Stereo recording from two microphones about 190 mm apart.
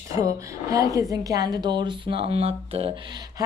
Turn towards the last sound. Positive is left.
turn(degrees=-20)  # may be behind; listen again after turning